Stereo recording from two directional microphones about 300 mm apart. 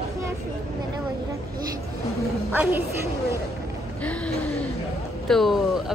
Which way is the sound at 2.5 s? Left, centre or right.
Centre.